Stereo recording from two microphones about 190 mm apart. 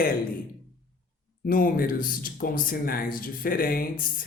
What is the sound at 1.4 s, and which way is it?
Speech, 45° left (ahead or behind).